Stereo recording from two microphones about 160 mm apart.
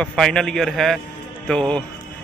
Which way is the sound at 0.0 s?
5° left (ahead or behind).